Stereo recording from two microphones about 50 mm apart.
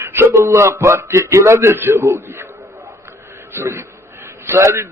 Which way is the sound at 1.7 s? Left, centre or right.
Right.